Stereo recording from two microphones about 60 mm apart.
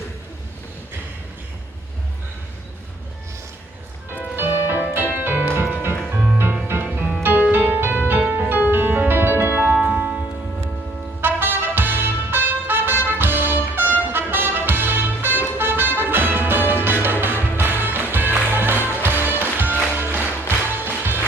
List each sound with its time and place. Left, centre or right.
4.4 s music: right
9.8 s music: right
11.2 s trumpet: right
14.1 s brass instrument: right
14.7 s music: right